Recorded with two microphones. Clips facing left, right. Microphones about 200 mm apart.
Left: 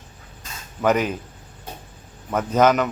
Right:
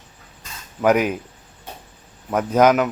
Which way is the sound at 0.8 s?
10° right (ahead or behind).